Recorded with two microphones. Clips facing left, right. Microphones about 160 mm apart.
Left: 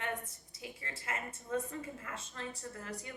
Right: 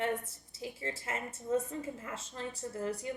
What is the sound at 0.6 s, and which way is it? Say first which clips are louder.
A woman's voice: right 6 dB; 30° right (ahead or behind).